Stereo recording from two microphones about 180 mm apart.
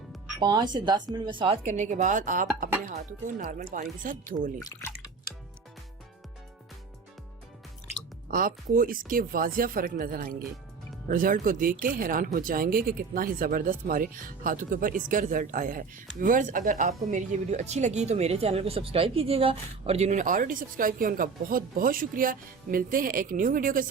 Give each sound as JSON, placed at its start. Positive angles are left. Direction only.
{"t": 0.3, "sound": "speech", "side_deg": -25}
{"t": 1.6, "sound": "a woman's voice", "side_deg": -40}
{"t": 4.6, "sound": "speech", "side_deg": 15}
{"t": 8.3, "sound": "a woman's voice", "side_deg": -50}